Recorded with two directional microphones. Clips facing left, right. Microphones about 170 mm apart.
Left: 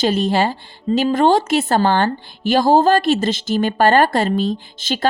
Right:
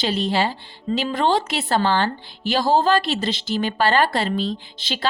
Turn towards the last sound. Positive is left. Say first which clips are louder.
# left 6 dB
turn(degrees=45)  # may be behind; listen again after turning